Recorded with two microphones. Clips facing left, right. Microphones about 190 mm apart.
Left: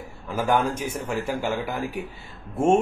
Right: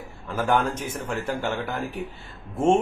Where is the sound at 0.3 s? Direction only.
10° left (ahead or behind).